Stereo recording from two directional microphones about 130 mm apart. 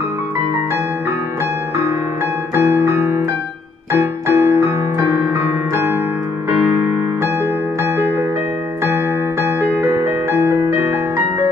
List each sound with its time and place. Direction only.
2.5 s music: 20° right (ahead or behind)
8.8 s music: 20° right (ahead or behind)